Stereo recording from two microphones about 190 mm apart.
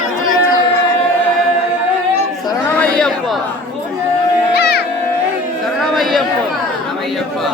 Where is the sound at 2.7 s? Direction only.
5° left (ahead or behind).